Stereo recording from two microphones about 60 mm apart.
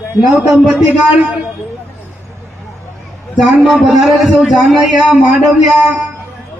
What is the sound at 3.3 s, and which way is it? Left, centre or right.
A man's voice, centre.